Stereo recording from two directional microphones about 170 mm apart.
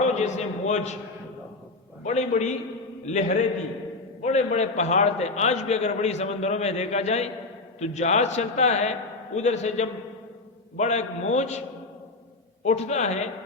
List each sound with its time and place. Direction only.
0.0 s a man's voice: 40° left (ahead or behind)
2.0 s a man's voice: 45° left (ahead or behind)
12.6 s a man's voice: 40° left (ahead or behind)